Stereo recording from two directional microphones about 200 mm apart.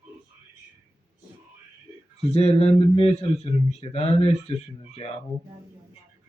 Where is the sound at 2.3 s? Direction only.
30° left (ahead or behind).